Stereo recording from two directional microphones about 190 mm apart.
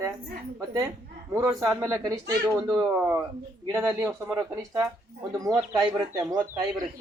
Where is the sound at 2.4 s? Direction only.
5° right (ahead or behind).